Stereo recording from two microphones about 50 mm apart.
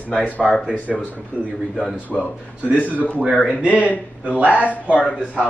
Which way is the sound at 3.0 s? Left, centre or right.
Left.